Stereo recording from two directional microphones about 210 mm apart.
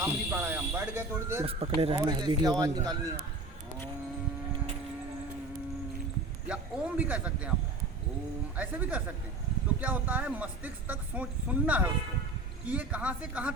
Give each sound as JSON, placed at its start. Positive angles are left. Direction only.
{"t": 0.0, "sound": "speech", "side_deg": -10}
{"t": 1.5, "sound": "a man's voice", "side_deg": -30}
{"t": 6.5, "sound": "speech", "side_deg": -5}
{"t": 8.5, "sound": "speech", "side_deg": -5}